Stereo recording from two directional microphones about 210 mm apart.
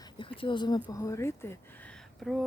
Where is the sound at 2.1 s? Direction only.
Centre (ahead or behind).